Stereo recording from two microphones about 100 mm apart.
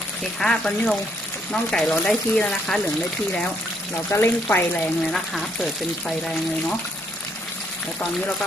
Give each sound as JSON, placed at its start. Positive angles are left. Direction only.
{"t": 0.3, "sound": "speech", "side_deg": 5}
{"t": 4.1, "sound": "speech", "side_deg": 20}
{"t": 5.1, "sound": "speech", "side_deg": 0}